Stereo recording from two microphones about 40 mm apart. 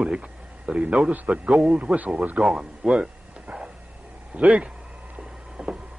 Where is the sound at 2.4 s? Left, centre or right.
Centre.